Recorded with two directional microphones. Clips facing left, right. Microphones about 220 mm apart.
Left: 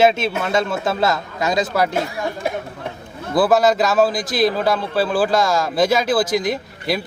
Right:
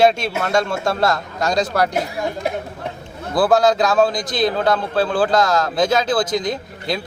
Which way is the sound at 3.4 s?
5° left (ahead or behind).